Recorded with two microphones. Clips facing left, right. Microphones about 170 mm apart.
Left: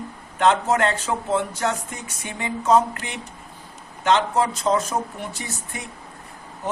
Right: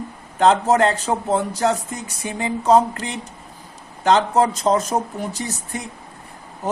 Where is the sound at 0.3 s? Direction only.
35° right (ahead or behind).